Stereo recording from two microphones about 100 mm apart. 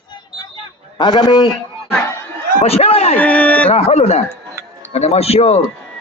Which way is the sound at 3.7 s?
90° left.